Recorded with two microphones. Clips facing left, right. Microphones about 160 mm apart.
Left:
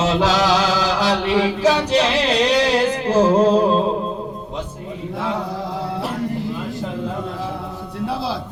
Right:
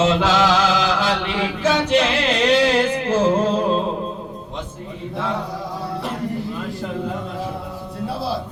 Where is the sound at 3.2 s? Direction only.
35° left (ahead or behind).